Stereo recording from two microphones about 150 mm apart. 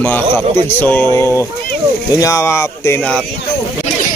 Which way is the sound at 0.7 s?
15° left (ahead or behind).